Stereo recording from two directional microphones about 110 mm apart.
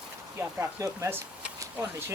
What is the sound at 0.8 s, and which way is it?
Speech, 30° right (ahead or behind).